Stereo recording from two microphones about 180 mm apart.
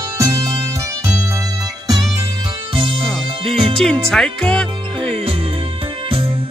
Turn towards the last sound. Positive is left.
turn(degrees=5)  # may be behind; listen again after turning